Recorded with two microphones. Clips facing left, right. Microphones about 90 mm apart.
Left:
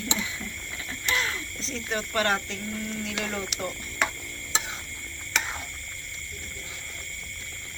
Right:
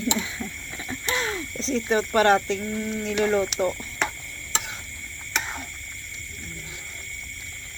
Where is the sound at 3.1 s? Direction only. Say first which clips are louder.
Right 13 dB; 40° right (ahead or behind).